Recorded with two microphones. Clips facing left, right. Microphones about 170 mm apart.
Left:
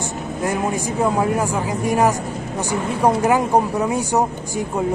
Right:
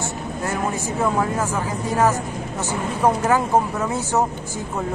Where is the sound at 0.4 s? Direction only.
15° left (ahead or behind).